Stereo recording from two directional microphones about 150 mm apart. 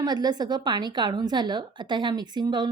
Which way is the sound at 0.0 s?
30° right (ahead or behind).